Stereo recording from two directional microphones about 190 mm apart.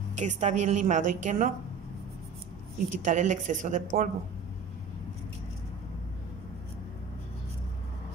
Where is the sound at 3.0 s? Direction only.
40° right (ahead or behind).